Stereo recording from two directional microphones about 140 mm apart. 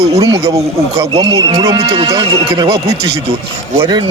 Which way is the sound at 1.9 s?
45° right (ahead or behind).